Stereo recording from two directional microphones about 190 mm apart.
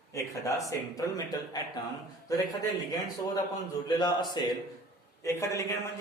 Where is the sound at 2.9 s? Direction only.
20° left (ahead or behind).